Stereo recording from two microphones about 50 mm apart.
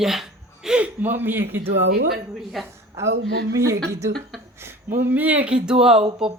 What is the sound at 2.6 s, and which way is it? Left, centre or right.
Speech, centre.